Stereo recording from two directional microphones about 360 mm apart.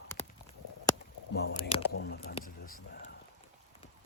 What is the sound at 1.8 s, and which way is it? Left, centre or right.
Speech, left.